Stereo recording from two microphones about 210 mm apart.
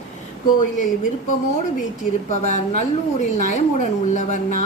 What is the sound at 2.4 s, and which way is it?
Speech, 35° left (ahead or behind).